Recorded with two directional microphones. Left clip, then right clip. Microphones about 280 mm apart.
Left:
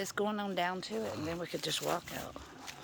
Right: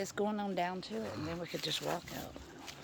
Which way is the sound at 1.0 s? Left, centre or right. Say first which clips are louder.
Left 3 dB; left.